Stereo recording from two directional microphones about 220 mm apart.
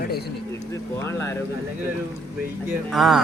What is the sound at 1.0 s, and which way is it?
Speech, 10° left (ahead or behind).